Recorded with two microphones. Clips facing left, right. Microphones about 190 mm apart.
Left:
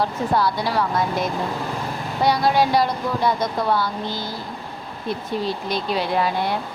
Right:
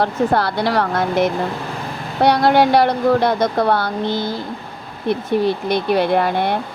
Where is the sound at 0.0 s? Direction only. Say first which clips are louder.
Right 4 dB; 65° right (ahead or behind).